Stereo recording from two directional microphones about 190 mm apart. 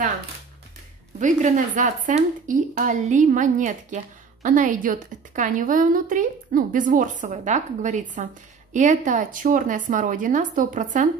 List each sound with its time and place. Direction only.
1.2 s a woman's voice: 40° right (ahead or behind)